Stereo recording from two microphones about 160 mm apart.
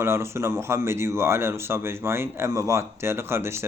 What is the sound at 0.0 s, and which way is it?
Speech, 15° right (ahead or behind).